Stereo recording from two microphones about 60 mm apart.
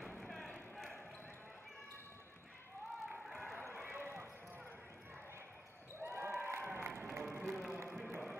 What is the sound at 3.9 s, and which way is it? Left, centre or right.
Basketball bounce, right.